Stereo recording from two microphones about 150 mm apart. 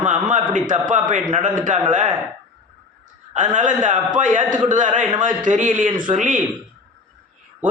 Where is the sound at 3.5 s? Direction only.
60° right (ahead or behind).